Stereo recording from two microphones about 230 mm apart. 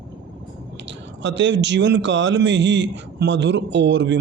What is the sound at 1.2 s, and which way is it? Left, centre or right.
Speech, right.